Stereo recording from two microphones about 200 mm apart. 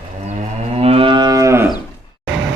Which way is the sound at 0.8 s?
25° right (ahead or behind).